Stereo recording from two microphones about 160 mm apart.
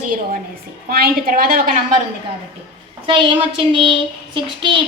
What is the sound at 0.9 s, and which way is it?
Speech, 70° right (ahead or behind).